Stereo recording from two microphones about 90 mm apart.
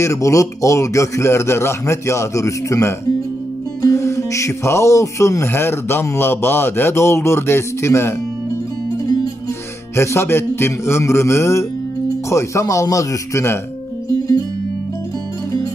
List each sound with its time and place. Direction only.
0.0 s a man's voice: 35° left (ahead or behind)
9.9 s a man's voice: 30° left (ahead or behind)